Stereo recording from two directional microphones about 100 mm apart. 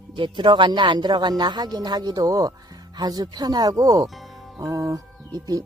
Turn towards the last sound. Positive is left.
turn(degrees=-35)  # may be behind; listen again after turning